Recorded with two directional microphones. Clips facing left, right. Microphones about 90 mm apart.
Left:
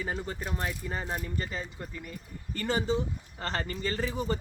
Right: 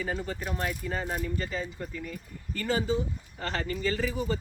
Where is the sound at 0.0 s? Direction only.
20° left (ahead or behind).